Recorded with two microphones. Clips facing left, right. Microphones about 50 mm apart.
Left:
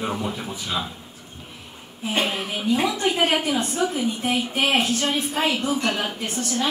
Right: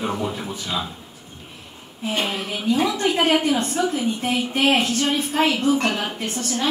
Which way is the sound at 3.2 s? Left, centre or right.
Centre.